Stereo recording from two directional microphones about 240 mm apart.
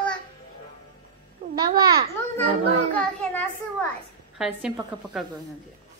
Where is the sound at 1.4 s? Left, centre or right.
Right.